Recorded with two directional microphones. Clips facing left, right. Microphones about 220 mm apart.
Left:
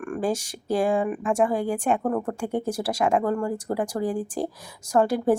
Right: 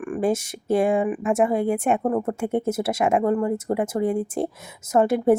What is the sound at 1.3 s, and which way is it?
Speech, 25° right (ahead or behind).